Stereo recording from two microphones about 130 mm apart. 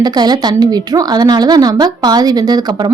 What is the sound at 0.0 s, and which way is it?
Speech, 30° right (ahead or behind).